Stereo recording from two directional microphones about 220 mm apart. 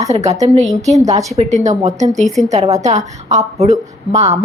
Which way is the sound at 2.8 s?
30° right (ahead or behind).